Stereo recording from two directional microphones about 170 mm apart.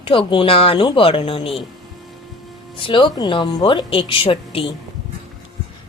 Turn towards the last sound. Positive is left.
turn(degrees=30)  # may be behind; listen again after turning